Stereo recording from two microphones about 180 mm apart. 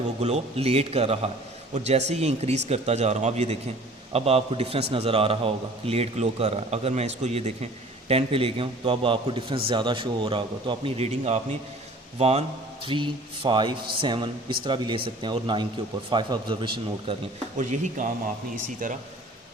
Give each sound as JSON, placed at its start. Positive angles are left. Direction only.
{"t": 0.2, "sound": "a man's voice", "side_deg": -35}
{"t": 17.6, "sound": "speech", "side_deg": -45}